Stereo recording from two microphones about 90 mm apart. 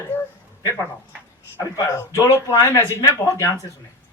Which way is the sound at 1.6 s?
35° left (ahead or behind).